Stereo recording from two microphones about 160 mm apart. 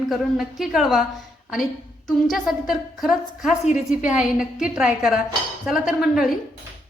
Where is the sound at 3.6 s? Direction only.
45° left (ahead or behind).